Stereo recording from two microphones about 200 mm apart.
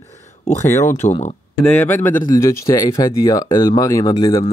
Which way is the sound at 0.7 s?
35° left (ahead or behind).